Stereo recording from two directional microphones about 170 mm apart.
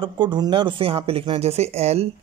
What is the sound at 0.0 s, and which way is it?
Speech, 25° right (ahead or behind).